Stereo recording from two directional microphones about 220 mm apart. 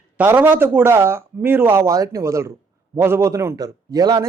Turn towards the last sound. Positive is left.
turn(degrees=-15)  # may be behind; listen again after turning